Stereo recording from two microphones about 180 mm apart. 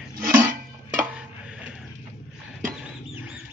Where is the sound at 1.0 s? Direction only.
5° right (ahead or behind).